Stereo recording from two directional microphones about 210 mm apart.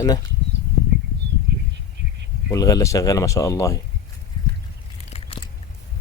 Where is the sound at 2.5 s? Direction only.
15° left (ahead or behind).